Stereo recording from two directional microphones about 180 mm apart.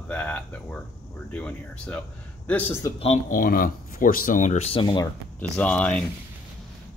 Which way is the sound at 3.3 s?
50° left (ahead or behind).